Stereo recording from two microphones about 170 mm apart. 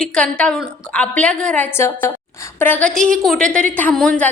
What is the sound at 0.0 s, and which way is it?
A woman's voice, 5° left (ahead or behind).